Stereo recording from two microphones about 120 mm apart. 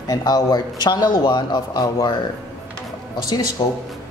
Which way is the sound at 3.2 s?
30° left (ahead or behind).